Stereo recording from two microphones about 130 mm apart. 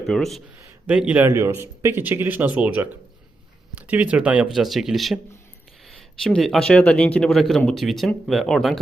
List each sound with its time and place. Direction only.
0.0 s speech: centre (ahead or behind)
0.9 s a man's voice: 10° right (ahead or behind)
1.3 s a man's voice: 20° right (ahead or behind); by 8.8 s centre (ahead or behind)